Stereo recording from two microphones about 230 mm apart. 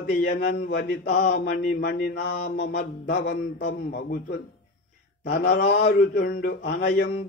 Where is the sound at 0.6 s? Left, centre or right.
Left.